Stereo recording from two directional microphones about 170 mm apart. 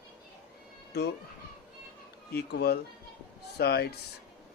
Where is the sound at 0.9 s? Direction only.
75° left (ahead or behind).